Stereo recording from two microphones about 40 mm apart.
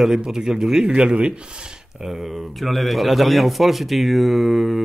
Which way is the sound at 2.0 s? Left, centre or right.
Centre.